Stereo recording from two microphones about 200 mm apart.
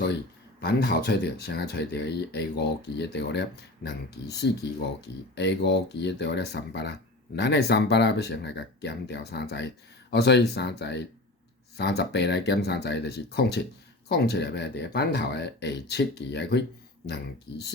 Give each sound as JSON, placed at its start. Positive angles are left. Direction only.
{"t": 0.6, "sound": "speech", "side_deg": 50}